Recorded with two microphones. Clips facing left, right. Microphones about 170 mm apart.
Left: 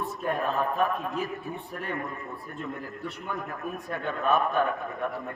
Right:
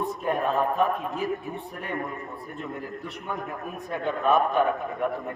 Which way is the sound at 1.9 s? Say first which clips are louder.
Right 3 dB; 20° right (ahead or behind).